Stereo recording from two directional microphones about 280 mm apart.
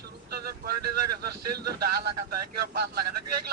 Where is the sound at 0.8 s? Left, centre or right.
Right.